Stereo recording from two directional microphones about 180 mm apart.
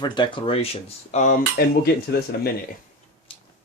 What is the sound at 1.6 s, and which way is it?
Speech, 55° left (ahead or behind).